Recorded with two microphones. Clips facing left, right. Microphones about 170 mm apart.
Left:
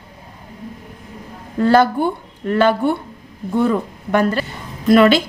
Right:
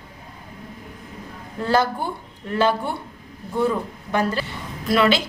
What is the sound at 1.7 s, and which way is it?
A woman's voice, 60° left (ahead or behind).